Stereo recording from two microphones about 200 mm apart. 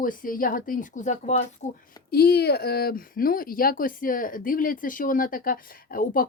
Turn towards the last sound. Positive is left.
turn(degrees=45)  # may be behind; listen again after turning